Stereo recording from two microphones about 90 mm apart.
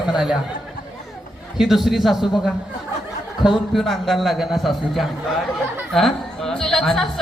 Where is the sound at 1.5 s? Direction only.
5° right (ahead or behind).